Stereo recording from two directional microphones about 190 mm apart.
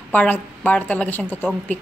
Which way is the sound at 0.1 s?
5° left (ahead or behind).